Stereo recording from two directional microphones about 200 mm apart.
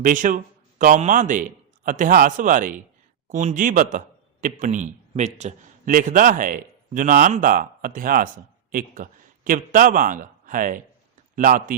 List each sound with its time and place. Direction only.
0.0 s a man's voice: 40° right (ahead or behind)